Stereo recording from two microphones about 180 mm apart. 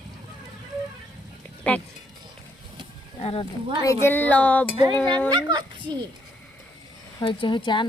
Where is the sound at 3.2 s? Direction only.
35° left (ahead or behind).